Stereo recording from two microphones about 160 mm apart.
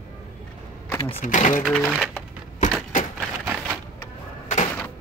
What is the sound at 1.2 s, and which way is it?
Speech, 50° left (ahead or behind).